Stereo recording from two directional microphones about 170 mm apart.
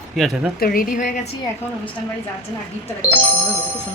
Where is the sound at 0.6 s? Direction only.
60° left (ahead or behind).